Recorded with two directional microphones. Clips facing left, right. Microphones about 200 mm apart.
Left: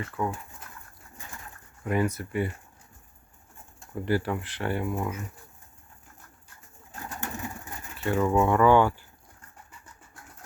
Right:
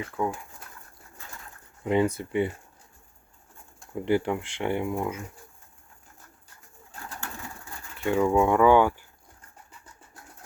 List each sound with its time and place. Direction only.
0.2 s speech: 10° right (ahead or behind)
1.2 s pigeon: 15° left (ahead or behind)
1.8 s speech: 25° right (ahead or behind)
3.9 s speech: 20° right (ahead or behind)
7.0 s pigeon: 20° left (ahead or behind)
7.9 s speech: 15° right (ahead or behind)